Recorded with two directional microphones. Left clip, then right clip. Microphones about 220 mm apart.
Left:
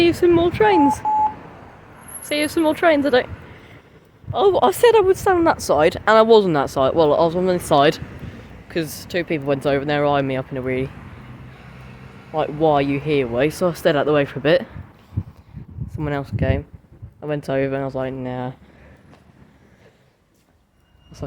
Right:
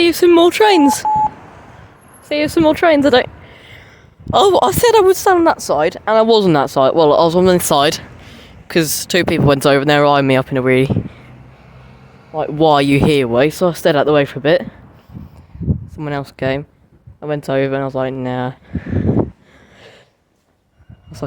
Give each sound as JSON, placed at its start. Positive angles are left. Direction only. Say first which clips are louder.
{"t": 0.0, "sound": "speech", "louder": "right 6 dB", "side_deg": -25}
{"t": 2.2, "sound": "speech", "louder": "right 6 dB", "side_deg": -15}
{"t": 4.3, "sound": "speech", "louder": "right 5 dB", "side_deg": -40}
{"t": 5.4, "sound": "speech", "louder": "right 3 dB", "side_deg": -10}
{"t": 6.2, "sound": "speech", "louder": "right 2 dB", "side_deg": -30}
{"t": 12.3, "sound": "a man's voice", "louder": "right 2 dB", "side_deg": -15}
{"t": 12.5, "sound": "speech", "louder": "right 7 dB", "side_deg": -40}
{"t": 13.5, "sound": "speech", "louder": "right 4 dB", "side_deg": -15}
{"t": 16.0, "sound": "speech", "louder": "right 1 dB", "side_deg": -10}
{"t": 16.3, "sound": "speech", "louder": "right 5 dB", "side_deg": -25}